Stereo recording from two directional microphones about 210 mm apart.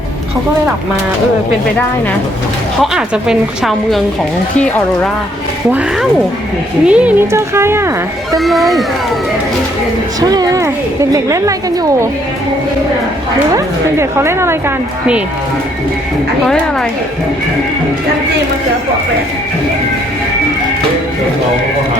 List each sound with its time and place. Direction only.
2.8 s a woman's voice: centre (ahead or behind)
6.8 s speech: 5° right (ahead or behind)
8.4 s a woman's voice: centre (ahead or behind)
10.2 s speech: 20° right (ahead or behind)
14.0 s speech: 10° right (ahead or behind)